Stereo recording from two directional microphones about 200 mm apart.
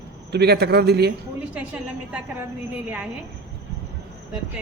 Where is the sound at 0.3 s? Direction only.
55° right (ahead or behind).